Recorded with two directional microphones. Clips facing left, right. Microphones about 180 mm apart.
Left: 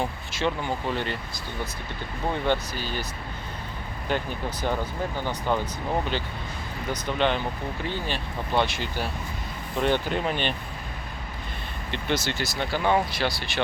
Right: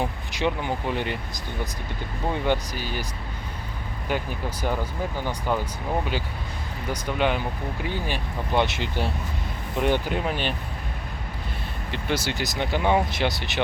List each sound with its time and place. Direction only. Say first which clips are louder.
0.0 s speech: right 1 dB; 15° right (ahead or behind)
2.3 s speech: right 1 dB; 10° right (ahead or behind)
4.1 s speech: even; 10° right (ahead or behind)
6.9 s speech: even; 10° right (ahead or behind)
9.7 s speech: right 1 dB; 10° right (ahead or behind)
11.9 s speech: even; 10° right (ahead or behind)